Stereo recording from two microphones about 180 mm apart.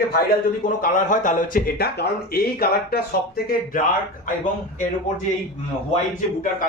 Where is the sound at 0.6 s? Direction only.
45° left (ahead or behind).